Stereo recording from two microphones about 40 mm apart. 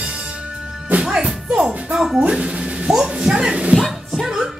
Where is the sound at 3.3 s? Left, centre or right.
Right.